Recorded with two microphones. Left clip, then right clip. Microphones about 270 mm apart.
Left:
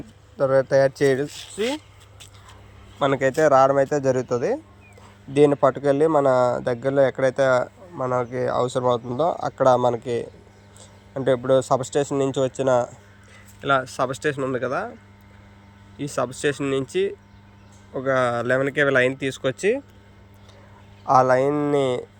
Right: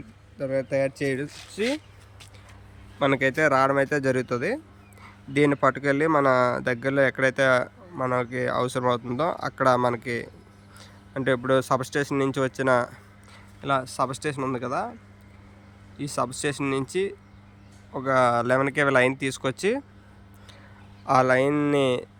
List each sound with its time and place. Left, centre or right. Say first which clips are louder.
0.3 s speech: left 8 dB; centre
1.6 s a sound: left 1 dB; left
3.0 s speech: left 3 dB; centre
7.9 s speech: left 2 dB; centre
8.5 s speech: left 4 dB; centre
16.0 s speech: left 3 dB; centre
21.0 s speech: left 3 dB; centre